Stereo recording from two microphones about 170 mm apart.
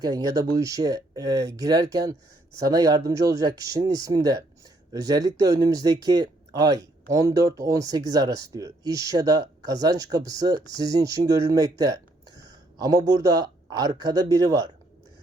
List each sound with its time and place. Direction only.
0.0 s speech: 20° right (ahead or behind)